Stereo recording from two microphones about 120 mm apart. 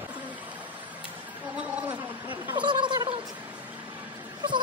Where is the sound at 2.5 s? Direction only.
40° right (ahead or behind).